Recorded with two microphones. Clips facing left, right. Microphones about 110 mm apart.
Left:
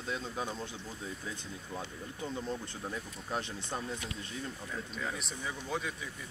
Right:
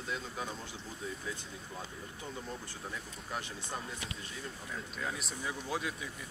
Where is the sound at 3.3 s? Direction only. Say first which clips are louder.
Left 3 dB; 25° left (ahead or behind).